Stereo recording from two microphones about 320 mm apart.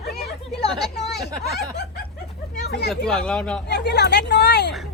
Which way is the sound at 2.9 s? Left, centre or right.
Centre.